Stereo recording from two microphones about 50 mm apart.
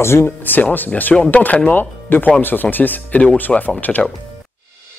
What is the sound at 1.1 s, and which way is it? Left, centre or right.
Speech, left.